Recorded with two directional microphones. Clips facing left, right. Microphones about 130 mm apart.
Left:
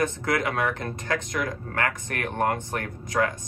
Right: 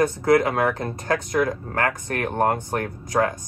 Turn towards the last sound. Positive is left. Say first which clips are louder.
# right 3 dB
turn(degrees=-35)  # may be behind; listen again after turning